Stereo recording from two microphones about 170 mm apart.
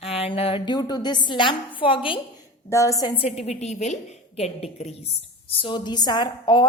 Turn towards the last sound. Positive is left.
turn(degrees=25)  # may be behind; listen again after turning